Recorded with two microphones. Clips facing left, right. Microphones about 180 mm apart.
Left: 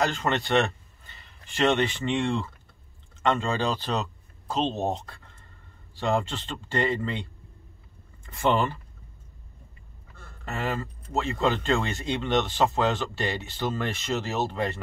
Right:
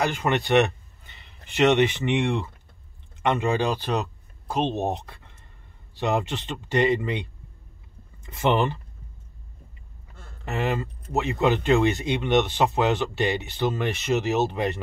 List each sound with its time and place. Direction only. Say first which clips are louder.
0.0 s speech: right 2 dB; 15° right (ahead or behind)
10.4 s speech: right 4 dB; 20° right (ahead or behind)